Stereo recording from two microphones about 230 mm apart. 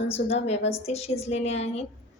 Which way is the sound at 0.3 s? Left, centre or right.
Left.